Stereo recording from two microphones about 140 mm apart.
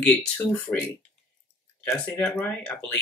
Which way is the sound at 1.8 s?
15° left (ahead or behind).